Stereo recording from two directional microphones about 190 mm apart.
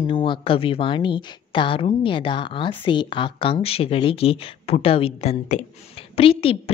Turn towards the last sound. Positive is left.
turn(degrees=30)  # may be behind; listen again after turning